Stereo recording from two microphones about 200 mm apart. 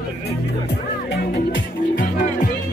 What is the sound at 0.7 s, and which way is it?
Music, 55° left (ahead or behind).